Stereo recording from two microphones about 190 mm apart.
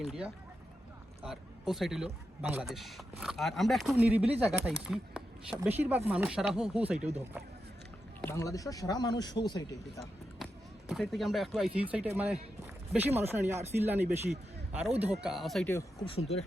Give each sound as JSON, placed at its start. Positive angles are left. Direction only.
{"t": 0.0, "sound": "a man's voice", "side_deg": -5}
{"t": 8.2, "sound": "speech", "side_deg": 15}
{"t": 10.3, "sound": "basketball bounce", "side_deg": 0}
{"t": 11.9, "sound": "speech", "side_deg": -10}
{"t": 14.9, "sound": "speech", "side_deg": -35}
{"t": 15.2, "sound": "a man's voice", "side_deg": 0}
{"t": 16.0, "sound": "speech", "side_deg": 30}